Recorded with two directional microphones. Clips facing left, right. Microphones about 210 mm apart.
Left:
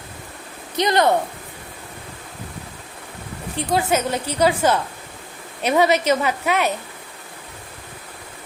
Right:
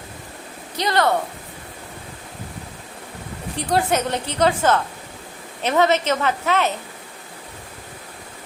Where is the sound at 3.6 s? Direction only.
5° left (ahead or behind).